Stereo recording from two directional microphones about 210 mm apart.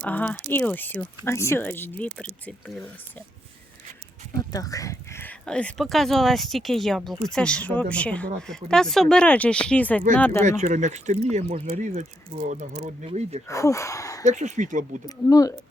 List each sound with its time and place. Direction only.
0.1 s speech: 5° left (ahead or behind)
4.4 s speech: 15° left (ahead or behind)
10.6 s speech: 35° right (ahead or behind)
13.5 s speech: 15° left (ahead or behind)
14.3 s speech: 35° right (ahead or behind)
15.3 s speech: 15° left (ahead or behind)